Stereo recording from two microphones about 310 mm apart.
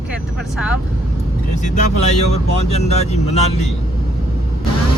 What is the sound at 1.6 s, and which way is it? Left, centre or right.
Speech, left.